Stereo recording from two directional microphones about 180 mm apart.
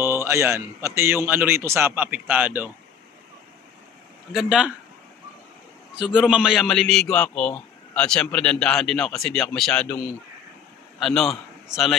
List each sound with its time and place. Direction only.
0.0 s a man's voice: 15° right (ahead or behind)
4.3 s a man's voice: 5° right (ahead or behind)
5.9 s a man's voice: 5° right (ahead or behind)
11.0 s a man's voice: centre (ahead or behind)